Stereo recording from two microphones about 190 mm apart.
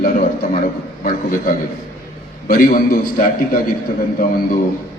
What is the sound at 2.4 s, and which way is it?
Speech, 45° left (ahead or behind).